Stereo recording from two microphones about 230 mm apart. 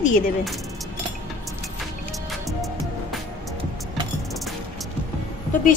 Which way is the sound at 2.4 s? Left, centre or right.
Centre.